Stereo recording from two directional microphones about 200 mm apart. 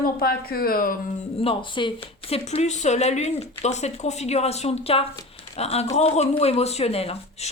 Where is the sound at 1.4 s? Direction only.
25° left (ahead or behind).